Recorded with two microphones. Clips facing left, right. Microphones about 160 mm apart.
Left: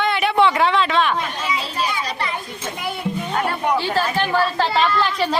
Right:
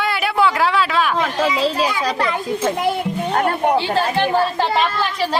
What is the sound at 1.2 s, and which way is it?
A child's voice, 90° right.